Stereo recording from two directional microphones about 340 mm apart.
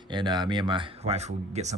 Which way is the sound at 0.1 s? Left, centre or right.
Centre.